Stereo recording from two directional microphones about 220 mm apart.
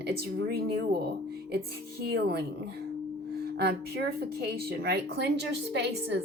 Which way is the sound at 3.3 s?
45° right (ahead or behind).